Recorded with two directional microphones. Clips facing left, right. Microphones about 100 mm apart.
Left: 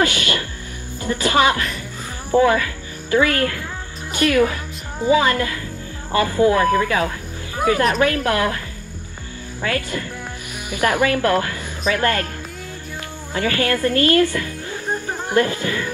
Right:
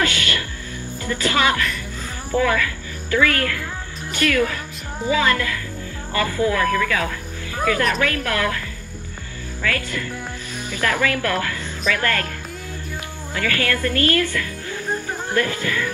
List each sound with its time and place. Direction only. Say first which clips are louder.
0.0 s music: left 3 dB; 20° left (ahead or behind)
1.0 s a woman's voice: left 3 dB; 20° left (ahead or behind)
13.3 s speech: left 3 dB; 25° left (ahead or behind)